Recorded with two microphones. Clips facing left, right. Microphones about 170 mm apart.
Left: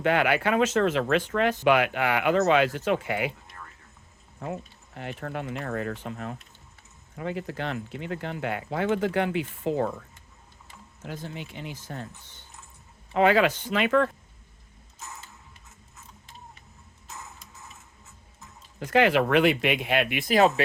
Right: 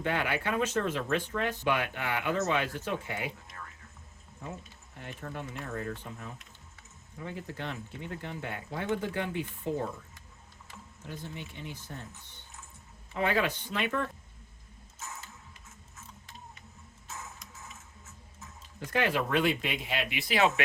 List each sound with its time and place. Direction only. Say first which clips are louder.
0.0 s speech: left 8 dB; 90° left
4.4 s speech: left 8 dB; 80° left
7.2 s speech: left 7 dB; 90° left
11.0 s speech: left 5 dB; 90° left
18.9 s speech: left 8 dB; 85° left; by 20.5 s 45° left (ahead or behind)